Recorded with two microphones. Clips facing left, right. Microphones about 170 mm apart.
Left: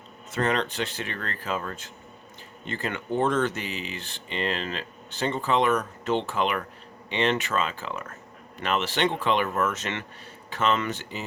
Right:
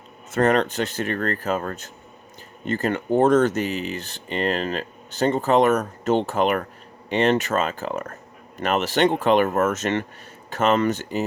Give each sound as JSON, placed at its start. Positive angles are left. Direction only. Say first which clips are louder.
{"t": 0.3, "sound": "speech", "louder": "right 7 dB", "side_deg": -45}